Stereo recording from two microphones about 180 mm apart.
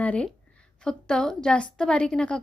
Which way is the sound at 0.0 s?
5° left (ahead or behind).